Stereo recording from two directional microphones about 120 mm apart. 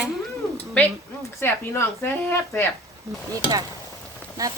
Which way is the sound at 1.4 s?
20° left (ahead or behind).